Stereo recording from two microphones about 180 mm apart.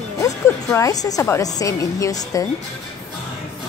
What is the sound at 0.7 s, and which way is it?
A woman's voice, 20° left (ahead or behind).